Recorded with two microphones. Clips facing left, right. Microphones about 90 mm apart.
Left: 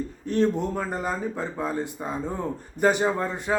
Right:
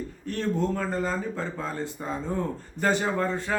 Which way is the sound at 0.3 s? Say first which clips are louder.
Left 4 dB; 20° left (ahead or behind).